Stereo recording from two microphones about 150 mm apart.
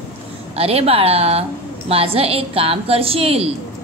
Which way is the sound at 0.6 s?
40° right (ahead or behind).